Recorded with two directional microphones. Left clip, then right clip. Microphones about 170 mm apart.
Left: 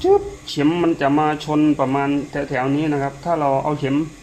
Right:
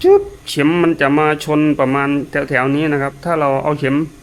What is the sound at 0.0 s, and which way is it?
A man's voice, 50° right (ahead or behind).